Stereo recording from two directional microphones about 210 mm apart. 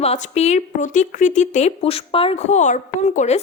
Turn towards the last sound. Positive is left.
turn(degrees=35)  # may be behind; listen again after turning